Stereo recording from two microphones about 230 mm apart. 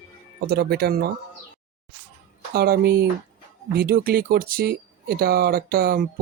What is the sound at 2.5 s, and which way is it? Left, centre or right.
Speech, right.